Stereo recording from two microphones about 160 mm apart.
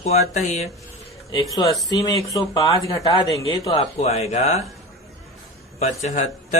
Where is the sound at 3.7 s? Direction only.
40° left (ahead or behind).